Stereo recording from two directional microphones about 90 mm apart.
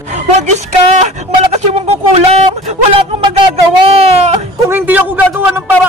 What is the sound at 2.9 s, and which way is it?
Speech, 80° right.